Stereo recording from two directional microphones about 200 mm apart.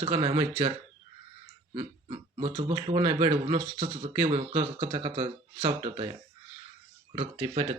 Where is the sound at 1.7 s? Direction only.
25° right (ahead or behind).